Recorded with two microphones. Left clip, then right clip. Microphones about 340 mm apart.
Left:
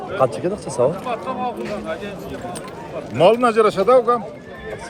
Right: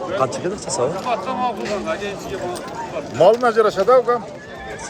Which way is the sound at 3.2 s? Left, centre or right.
Left.